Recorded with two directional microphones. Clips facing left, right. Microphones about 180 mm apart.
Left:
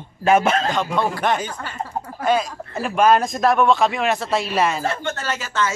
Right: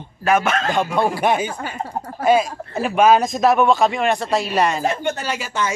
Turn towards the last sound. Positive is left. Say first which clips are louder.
# even
turn(degrees=-15)  # may be behind; listen again after turning